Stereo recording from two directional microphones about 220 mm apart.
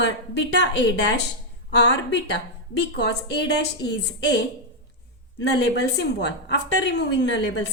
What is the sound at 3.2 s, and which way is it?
A woman's voice, 50° left (ahead or behind).